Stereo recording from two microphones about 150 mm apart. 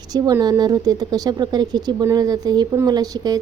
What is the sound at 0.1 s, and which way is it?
A woman's voice, 25° right (ahead or behind).